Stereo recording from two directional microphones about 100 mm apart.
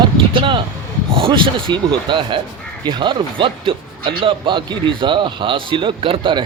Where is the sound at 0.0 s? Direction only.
55° right (ahead or behind).